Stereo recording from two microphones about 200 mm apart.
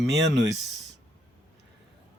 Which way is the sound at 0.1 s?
60° right (ahead or behind).